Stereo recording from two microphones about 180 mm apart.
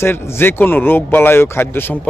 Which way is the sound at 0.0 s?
15° left (ahead or behind).